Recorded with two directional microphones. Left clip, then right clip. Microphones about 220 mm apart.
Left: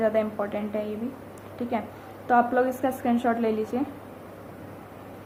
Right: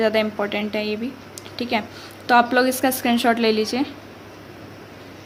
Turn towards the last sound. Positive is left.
turn(degrees=-40)  # may be behind; listen again after turning